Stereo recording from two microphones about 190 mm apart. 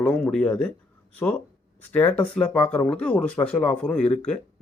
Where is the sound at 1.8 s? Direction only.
10° left (ahead or behind).